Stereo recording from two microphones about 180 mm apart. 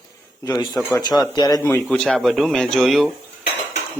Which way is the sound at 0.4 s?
20° left (ahead or behind).